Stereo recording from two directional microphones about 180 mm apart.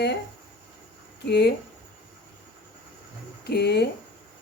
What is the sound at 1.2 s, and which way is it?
Speech, 65° left (ahead or behind).